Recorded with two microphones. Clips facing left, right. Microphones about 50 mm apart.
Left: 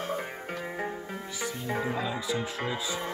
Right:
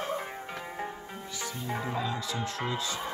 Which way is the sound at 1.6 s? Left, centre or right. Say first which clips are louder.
Left 1 dB; centre.